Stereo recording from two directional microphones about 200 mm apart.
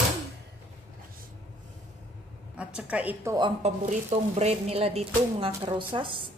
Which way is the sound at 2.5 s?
5° right (ahead or behind).